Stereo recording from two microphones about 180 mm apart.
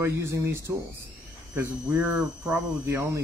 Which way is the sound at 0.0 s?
15° right (ahead or behind).